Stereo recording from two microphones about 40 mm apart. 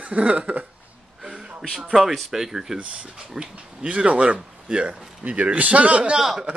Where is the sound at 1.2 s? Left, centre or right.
Centre.